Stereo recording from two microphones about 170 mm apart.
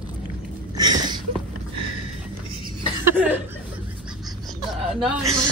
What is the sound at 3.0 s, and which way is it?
Chuckle, 10° right (ahead or behind).